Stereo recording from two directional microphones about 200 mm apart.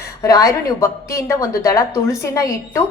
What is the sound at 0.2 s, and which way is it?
A woman's voice, 15° left (ahead or behind).